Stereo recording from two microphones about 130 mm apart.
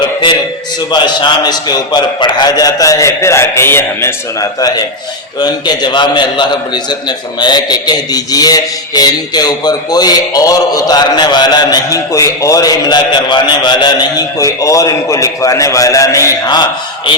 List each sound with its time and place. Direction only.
0.0 s a sound: 35° left (ahead or behind)
0.9 s speech: 35° left (ahead or behind)
5.4 s a man's voice: 35° left (ahead or behind)